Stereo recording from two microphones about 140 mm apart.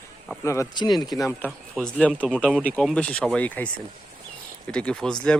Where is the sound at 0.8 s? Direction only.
30° left (ahead or behind).